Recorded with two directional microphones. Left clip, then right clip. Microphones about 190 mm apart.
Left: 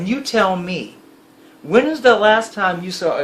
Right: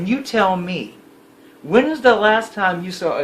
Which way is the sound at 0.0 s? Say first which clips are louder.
Even; 15° left (ahead or behind).